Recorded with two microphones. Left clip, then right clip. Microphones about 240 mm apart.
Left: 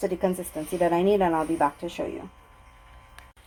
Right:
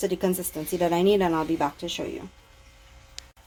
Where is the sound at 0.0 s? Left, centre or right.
Right.